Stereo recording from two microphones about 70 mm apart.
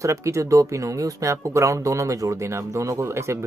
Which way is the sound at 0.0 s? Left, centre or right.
Right.